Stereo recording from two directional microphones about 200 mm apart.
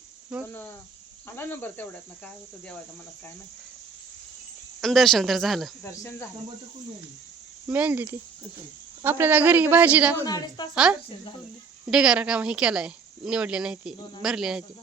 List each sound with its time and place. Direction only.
0.4 s cricket: 10° left (ahead or behind)
4.8 s speech: centre (ahead or behind)
5.8 s cricket: 15° left (ahead or behind)
7.7 s a woman's voice: 5° right (ahead or behind)
10.2 s a woman's voice: 20° left (ahead or behind)
11.9 s speech: 5° right (ahead or behind)